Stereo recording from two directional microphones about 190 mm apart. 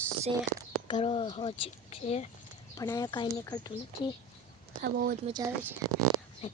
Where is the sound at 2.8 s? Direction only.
20° left (ahead or behind).